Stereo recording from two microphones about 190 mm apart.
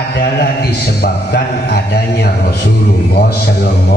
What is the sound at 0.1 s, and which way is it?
A man's voice, 55° left (ahead or behind).